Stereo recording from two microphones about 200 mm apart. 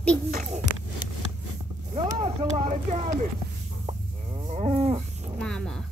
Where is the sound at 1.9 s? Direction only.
30° right (ahead or behind).